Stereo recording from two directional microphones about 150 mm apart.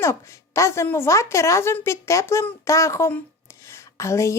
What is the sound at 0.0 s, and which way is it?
Speech, 20° left (ahead or behind).